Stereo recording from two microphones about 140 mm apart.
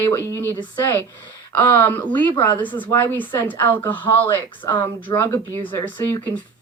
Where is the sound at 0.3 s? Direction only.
15° left (ahead or behind).